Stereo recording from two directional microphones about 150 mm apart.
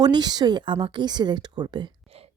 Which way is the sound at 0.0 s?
30° right (ahead or behind).